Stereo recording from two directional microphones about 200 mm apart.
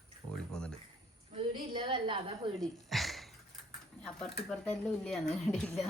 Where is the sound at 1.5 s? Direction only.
25° right (ahead or behind).